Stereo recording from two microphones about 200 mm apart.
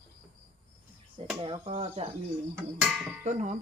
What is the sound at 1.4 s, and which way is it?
Speech, 25° right (ahead or behind).